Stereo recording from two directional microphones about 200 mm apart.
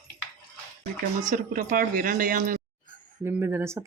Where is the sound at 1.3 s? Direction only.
45° right (ahead or behind).